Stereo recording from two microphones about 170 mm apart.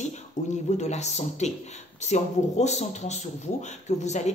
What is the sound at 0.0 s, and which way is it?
Speech, 45° left (ahead or behind).